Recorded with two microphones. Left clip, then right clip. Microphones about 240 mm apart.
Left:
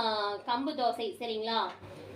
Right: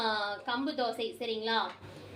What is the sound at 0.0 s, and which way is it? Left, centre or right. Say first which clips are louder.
A woman's voice: left 1 dB; right.